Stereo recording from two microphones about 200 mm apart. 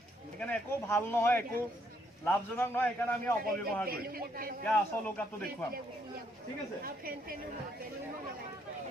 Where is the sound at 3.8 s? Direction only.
50° right (ahead or behind).